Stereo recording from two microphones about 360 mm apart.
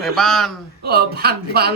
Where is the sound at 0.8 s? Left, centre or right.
Right.